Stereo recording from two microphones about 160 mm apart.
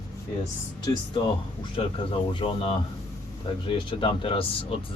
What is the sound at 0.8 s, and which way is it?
Speech, 25° left (ahead or behind).